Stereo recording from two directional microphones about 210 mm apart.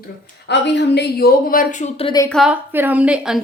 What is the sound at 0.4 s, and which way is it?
Speech, 55° left (ahead or behind).